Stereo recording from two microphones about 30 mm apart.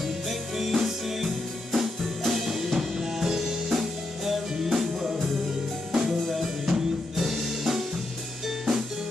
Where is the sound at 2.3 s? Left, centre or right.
Centre.